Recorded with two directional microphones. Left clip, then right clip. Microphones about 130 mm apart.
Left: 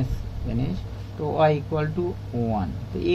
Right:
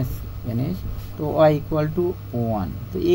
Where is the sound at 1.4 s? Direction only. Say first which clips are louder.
Right 4 dB; 65° right (ahead or behind).